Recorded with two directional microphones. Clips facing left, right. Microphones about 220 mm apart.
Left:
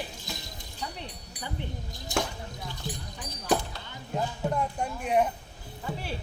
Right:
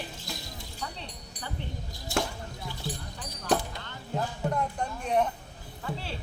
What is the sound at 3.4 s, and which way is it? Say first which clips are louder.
A man's voice: even; 10° left (ahead or behind).